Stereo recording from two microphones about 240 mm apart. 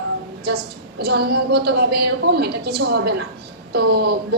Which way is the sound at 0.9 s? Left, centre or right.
Right.